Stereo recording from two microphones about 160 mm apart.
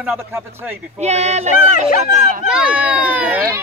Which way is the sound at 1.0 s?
45° right (ahead or behind).